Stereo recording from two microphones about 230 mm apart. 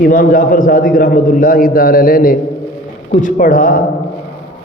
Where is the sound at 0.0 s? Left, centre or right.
Left.